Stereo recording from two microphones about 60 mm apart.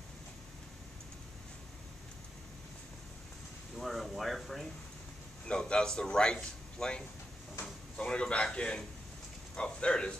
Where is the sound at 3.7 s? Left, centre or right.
Centre.